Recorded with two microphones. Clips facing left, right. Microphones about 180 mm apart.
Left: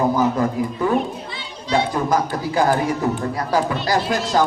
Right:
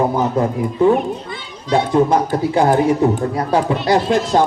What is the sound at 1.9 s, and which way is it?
A man's voice, 25° right (ahead or behind).